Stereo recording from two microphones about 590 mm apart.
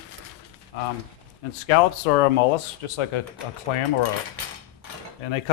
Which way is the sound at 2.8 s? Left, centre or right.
Left.